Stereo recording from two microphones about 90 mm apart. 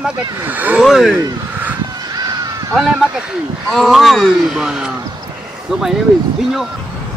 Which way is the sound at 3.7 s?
Centre (ahead or behind).